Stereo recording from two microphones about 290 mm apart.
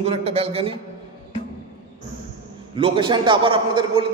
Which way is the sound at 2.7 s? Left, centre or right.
Centre.